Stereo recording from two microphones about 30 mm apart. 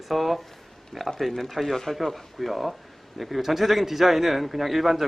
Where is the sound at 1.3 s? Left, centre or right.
Centre.